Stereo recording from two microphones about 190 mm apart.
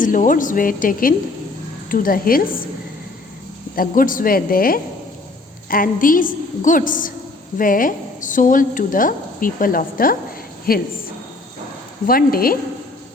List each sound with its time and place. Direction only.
0.0 s a woman's voice: 45° left (ahead or behind)
3.8 s a woman's voice: 45° left (ahead or behind)
12.0 s a woman's voice: 50° left (ahead or behind)